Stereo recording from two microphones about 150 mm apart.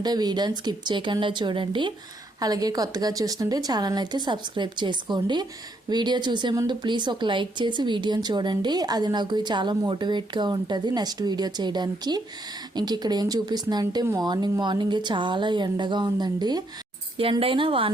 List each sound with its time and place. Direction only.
0.0 s speech: 30° right (ahead or behind)